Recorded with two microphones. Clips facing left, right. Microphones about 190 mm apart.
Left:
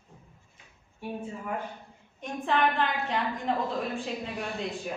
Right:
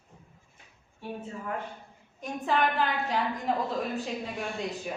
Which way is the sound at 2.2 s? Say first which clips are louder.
Even; centre (ahead or behind).